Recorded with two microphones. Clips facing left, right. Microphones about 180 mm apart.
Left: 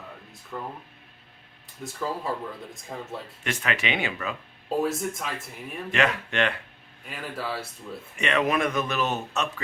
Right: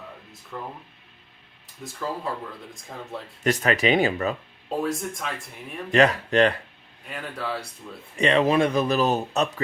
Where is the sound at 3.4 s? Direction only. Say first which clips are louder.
Right 8 dB; 40° right (ahead or behind).